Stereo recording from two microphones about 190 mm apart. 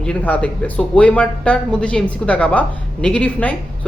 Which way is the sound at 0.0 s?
5° left (ahead or behind).